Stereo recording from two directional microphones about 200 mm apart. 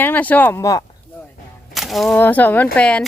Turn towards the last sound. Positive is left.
turn(degrees=5)  # may be behind; listen again after turning